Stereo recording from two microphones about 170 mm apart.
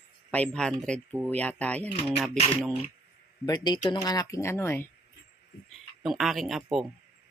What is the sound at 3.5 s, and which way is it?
Speech, 25° left (ahead or behind).